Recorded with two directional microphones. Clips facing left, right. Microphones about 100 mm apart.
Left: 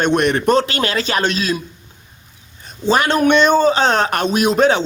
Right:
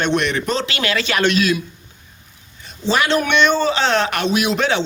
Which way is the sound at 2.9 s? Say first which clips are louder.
Left 3 dB; 45° left (ahead or behind).